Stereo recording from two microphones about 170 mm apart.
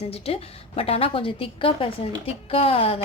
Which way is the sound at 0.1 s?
35° left (ahead or behind).